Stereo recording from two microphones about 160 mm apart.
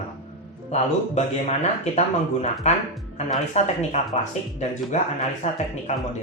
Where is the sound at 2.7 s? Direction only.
45° left (ahead or behind).